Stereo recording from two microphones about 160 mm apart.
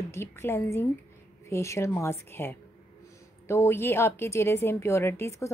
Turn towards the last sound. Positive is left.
turn(degrees=15)  # may be behind; listen again after turning